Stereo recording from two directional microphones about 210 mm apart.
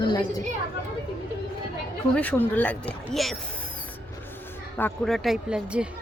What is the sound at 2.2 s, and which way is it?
Speech, 5° left (ahead or behind).